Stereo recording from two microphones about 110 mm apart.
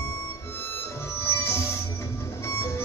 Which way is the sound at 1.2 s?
25° left (ahead or behind).